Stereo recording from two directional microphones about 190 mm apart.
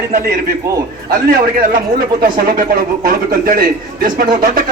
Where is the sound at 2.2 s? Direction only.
50° right (ahead or behind).